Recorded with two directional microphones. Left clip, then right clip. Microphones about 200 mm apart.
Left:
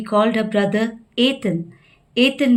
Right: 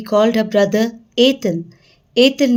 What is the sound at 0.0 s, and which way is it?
A woman's voice, 50° right (ahead or behind).